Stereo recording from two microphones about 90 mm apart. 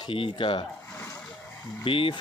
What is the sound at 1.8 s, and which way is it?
Speech, 75° left (ahead or behind).